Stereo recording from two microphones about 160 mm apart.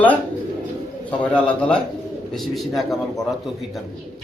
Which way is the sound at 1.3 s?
5° left (ahead or behind).